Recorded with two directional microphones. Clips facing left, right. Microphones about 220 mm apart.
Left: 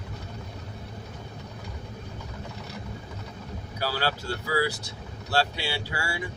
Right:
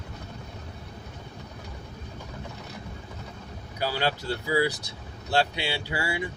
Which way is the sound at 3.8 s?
20° right (ahead or behind).